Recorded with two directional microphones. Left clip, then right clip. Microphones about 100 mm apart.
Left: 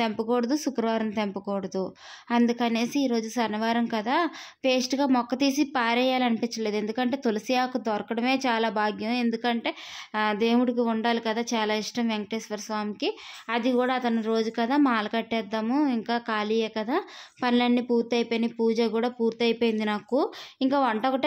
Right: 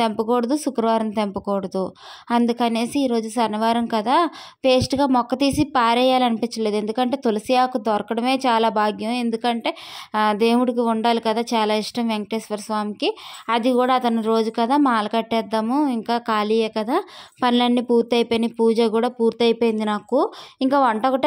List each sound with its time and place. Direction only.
0.2 s a woman's voice: 35° right (ahead or behind)
10.1 s a woman's voice: 60° right (ahead or behind)
13.5 s a woman's voice: 55° right (ahead or behind)
15.6 s a woman's voice: 40° right (ahead or behind)
19.6 s a woman's voice: 35° right (ahead or behind)
20.5 s a woman's voice: 50° right (ahead or behind)
20.9 s a woman's voice: 40° right (ahead or behind)